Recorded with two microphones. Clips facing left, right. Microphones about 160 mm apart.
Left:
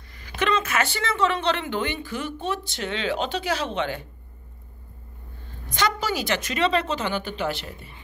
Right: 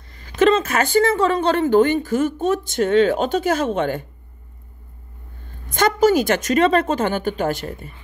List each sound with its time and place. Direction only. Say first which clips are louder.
0.2 s speech: right 9 dB; 35° right (ahead or behind)
5.7 s speech: right 10 dB; 50° right (ahead or behind)